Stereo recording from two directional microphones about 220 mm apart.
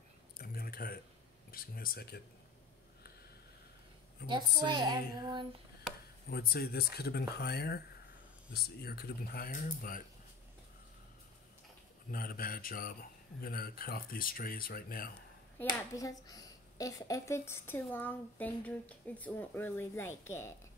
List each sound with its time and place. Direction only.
0.4 s a sound: 45° left (ahead or behind)
1.5 s a man's voice: 40° left (ahead or behind)
4.3 s a woman's voice: 20° right (ahead or behind)
6.3 s speech: 45° left (ahead or behind)
12.1 s a man's voice: 40° left (ahead or behind)
15.5 s a child's voice: 15° left (ahead or behind)